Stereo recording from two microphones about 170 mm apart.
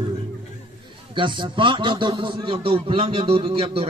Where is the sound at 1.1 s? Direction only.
30° right (ahead or behind).